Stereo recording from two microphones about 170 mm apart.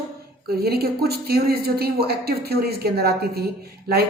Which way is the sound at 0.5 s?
65° right (ahead or behind).